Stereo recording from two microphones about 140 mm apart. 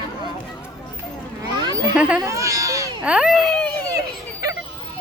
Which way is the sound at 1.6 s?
25° right (ahead or behind).